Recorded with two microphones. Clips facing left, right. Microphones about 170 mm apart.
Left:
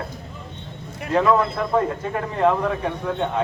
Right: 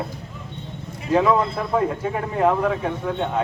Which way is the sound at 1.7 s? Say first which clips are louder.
Right 1 dB; 5° right (ahead or behind).